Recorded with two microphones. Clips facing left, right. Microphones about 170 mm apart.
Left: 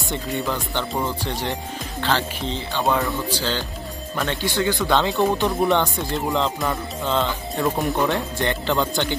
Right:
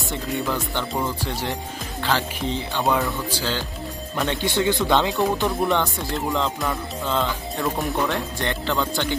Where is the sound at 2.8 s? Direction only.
Centre (ahead or behind); by 5.0 s 20° right (ahead or behind).